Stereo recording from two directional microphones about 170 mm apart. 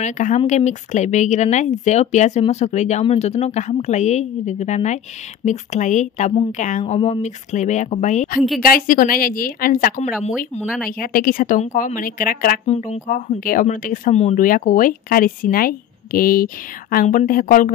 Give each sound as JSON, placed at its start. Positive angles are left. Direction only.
{"t": 0.0, "sound": "speech", "side_deg": 45}
{"t": 8.4, "sound": "speech", "side_deg": 0}
{"t": 8.6, "sound": "a woman's voice", "side_deg": 55}
{"t": 10.6, "sound": "speech", "side_deg": -5}
{"t": 10.9, "sound": "a woman's voice", "side_deg": 55}
{"t": 12.6, "sound": "speech", "side_deg": 40}